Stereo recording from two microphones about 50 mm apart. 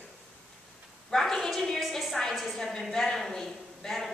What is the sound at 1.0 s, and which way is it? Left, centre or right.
A woman's voice, centre.